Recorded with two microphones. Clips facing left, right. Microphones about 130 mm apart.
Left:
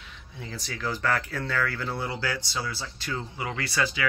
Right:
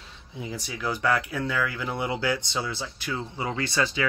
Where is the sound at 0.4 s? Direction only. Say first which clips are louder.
Right 2 dB; 15° right (ahead or behind).